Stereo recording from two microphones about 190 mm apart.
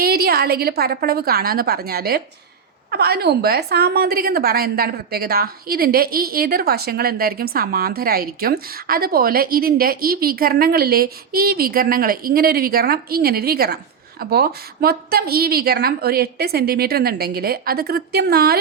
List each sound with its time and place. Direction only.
0.0 s a woman's voice: 55° right (ahead or behind)